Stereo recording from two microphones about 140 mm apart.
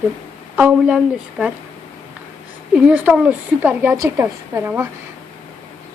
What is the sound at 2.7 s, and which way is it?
A woman's voice, 10° right (ahead or behind).